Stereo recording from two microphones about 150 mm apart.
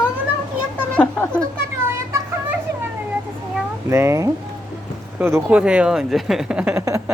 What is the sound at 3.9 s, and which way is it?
Speech, 20° right (ahead or behind).